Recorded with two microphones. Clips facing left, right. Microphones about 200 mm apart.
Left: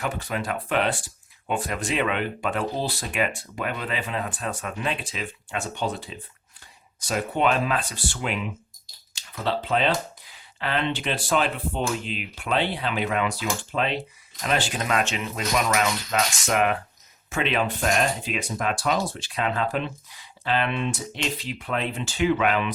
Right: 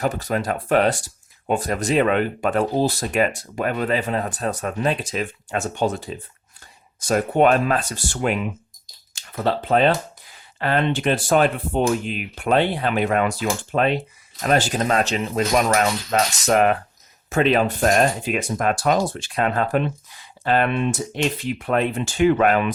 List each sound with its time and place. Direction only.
0.0 s speech: 40° right (ahead or behind)